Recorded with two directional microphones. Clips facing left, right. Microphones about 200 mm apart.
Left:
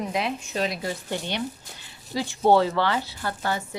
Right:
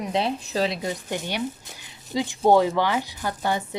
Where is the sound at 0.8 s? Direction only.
20° right (ahead or behind).